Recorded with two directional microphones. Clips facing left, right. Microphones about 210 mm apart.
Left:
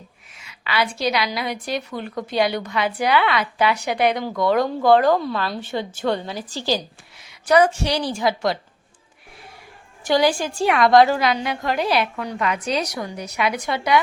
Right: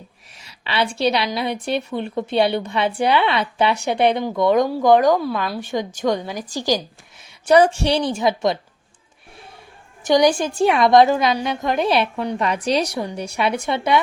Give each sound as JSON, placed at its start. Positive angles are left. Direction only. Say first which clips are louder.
{"t": 0.3, "sound": "a woman's voice", "louder": "right 1 dB", "side_deg": -30}
{"t": 7.4, "sound": "a woman's voice", "louder": "right 2 dB", "side_deg": -30}
{"t": 10.1, "sound": "a woman's voice", "louder": "right 3 dB", "side_deg": -20}